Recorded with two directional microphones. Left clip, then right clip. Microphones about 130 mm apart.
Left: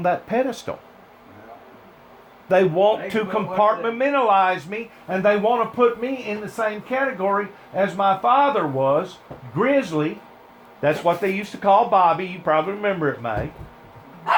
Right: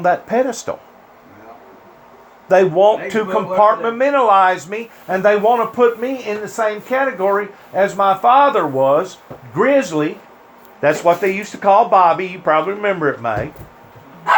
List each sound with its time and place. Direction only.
0.0 s speech: 30° right (ahead or behind)
2.5 s a man's voice: 25° right (ahead or behind)